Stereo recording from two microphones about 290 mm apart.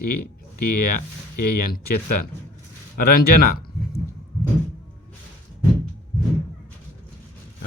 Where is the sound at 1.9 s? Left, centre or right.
Left.